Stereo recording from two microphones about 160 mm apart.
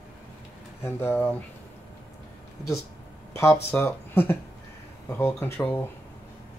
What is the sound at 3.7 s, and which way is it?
Speech, 15° left (ahead or behind).